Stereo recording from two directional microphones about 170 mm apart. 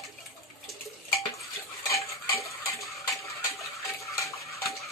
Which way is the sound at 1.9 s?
20° left (ahead or behind).